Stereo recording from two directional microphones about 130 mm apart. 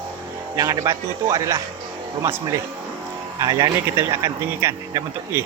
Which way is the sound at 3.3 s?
30° right (ahead or behind).